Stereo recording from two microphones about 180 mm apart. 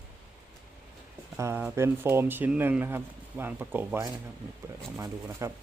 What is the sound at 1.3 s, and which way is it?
Speech, 15° right (ahead or behind).